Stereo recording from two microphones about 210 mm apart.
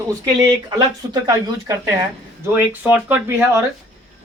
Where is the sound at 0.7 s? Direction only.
20° right (ahead or behind).